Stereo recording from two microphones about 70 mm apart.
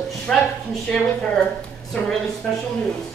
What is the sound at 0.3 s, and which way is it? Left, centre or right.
Speech, centre.